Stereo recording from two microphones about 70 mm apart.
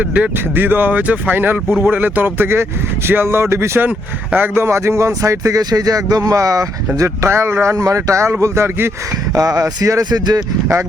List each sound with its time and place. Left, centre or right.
0.0 s speech: right
3.8 s speech: right
4.5 s speech: right
9.3 s speech: right
10.0 s speech: right